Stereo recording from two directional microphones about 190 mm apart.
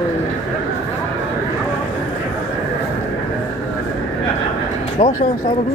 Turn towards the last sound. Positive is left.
turn(degrees=35)  # may be behind; listen again after turning